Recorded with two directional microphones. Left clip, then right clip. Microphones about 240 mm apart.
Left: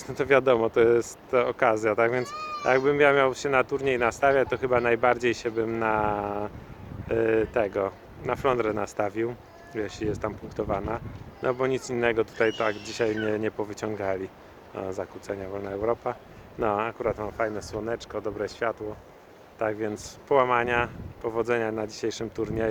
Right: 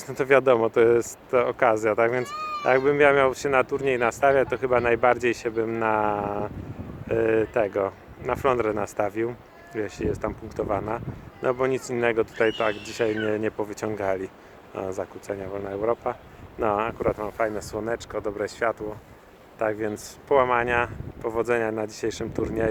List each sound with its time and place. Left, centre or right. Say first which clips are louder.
0.0 s speech: right 2 dB; centre
2.2 s speech: right 3 dB; right
2.6 s speech: right 2 dB; centre